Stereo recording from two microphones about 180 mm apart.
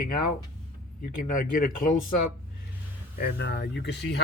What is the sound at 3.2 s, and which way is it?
Speech, 65° left (ahead or behind).